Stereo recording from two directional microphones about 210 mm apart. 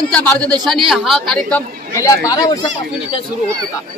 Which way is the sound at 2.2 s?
15° left (ahead or behind).